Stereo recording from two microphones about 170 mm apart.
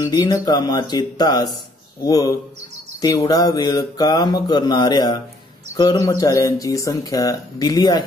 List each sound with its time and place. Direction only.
0.0 s speech: 20° left (ahead or behind)